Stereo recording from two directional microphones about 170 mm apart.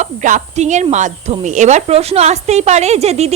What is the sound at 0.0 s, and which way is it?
Speech, 45° right (ahead or behind).